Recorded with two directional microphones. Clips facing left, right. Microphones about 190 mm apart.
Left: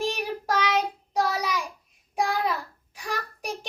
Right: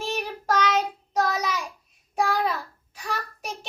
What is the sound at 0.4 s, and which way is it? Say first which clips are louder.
Child singing: right 2 dB; 10° left (ahead or behind).